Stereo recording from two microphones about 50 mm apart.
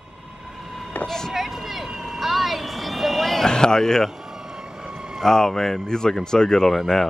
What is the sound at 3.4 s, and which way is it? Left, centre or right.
Speech, centre.